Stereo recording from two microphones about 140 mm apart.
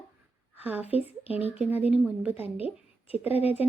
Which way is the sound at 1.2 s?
45° left (ahead or behind).